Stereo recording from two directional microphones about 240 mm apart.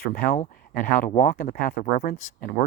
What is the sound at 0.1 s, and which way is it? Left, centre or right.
Speech, left.